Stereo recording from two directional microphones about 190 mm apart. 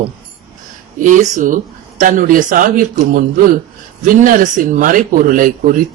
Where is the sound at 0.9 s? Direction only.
40° right (ahead or behind).